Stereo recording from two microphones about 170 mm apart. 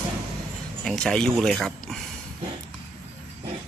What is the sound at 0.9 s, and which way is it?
Speech, 5° left (ahead or behind).